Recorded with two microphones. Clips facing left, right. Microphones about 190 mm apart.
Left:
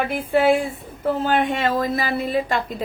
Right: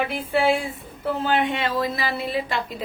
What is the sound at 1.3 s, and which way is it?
A woman's voice, 45° left (ahead or behind).